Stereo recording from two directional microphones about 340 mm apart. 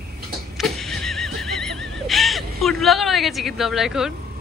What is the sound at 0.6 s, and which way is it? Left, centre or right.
Neigh, centre.